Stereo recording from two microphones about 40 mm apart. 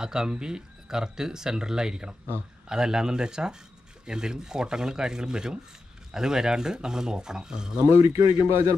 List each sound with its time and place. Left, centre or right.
0.0 s speech: centre